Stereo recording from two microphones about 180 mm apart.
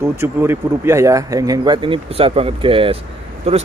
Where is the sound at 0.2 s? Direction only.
15° right (ahead or behind).